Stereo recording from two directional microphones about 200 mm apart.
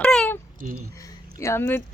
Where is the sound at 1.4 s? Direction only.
15° left (ahead or behind).